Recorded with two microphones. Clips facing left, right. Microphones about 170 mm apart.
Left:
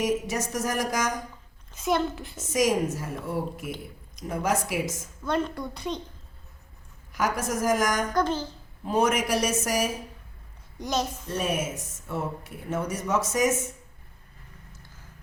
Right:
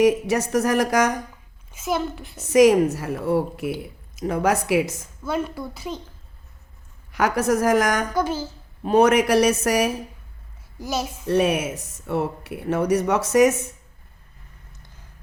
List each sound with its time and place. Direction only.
0.0 s a woman's voice: 65° right (ahead or behind)
1.7 s speech: 5° right (ahead or behind)
2.4 s speech: 65° right (ahead or behind)
5.2 s speech: 5° right (ahead or behind)
7.1 s a woman's voice: 65° right (ahead or behind)
8.1 s speech: 10° right (ahead or behind)
8.8 s a woman's voice: 65° right (ahead or behind)
10.8 s speech: 5° right (ahead or behind)
11.3 s speech: 70° right (ahead or behind)